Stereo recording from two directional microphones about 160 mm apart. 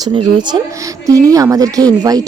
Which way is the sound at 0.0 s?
25° right (ahead or behind).